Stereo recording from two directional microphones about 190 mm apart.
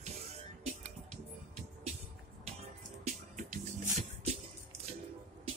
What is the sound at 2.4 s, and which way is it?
Music, 35° right (ahead or behind).